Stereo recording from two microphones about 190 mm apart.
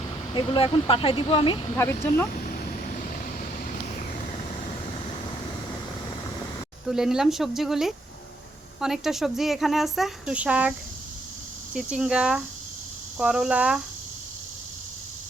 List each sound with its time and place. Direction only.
0.3 s speech: 30° left (ahead or behind)
1.7 s speech: 10° left (ahead or behind)
6.8 s speech: centre (ahead or behind)